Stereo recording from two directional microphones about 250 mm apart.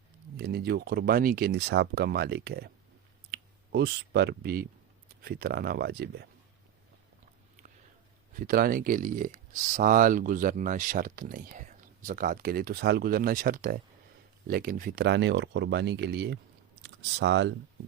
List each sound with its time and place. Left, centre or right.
0.3 s speech: right
8.3 s speech: right